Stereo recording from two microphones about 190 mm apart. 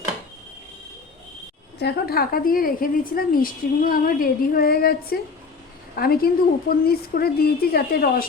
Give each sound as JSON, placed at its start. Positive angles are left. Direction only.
{"t": 1.8, "sound": "a woman's voice", "side_deg": 55}